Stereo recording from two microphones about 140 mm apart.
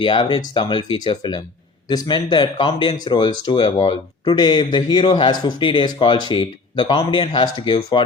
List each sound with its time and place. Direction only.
0.0 s speech: 35° left (ahead or behind)
7.6 s speech: 40° left (ahead or behind)